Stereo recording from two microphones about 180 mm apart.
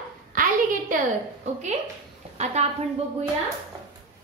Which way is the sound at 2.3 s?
35° right (ahead or behind).